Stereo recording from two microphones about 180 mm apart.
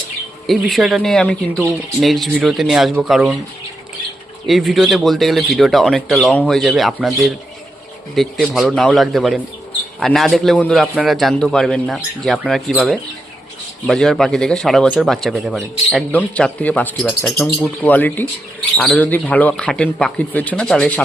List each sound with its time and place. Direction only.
0.4 s speech: centre (ahead or behind)
4.4 s speech: centre (ahead or behind)
17.8 s speech: 10° left (ahead or behind)